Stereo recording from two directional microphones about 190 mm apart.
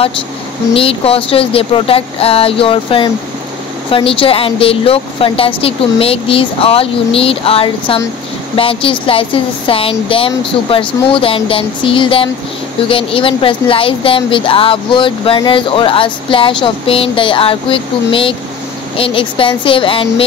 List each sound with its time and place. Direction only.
0.7 s speech: 30° left (ahead or behind)